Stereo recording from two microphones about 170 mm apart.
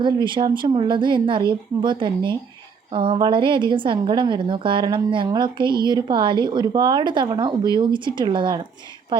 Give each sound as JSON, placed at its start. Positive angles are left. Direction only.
{"t": 0.0, "sound": "a woman's voice", "side_deg": -25}